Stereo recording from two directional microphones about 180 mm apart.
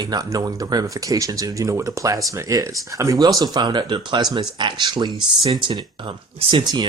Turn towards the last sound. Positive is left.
turn(degrees=-25)  # may be behind; listen again after turning